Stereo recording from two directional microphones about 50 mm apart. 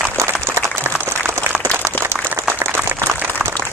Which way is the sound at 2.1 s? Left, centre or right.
Centre.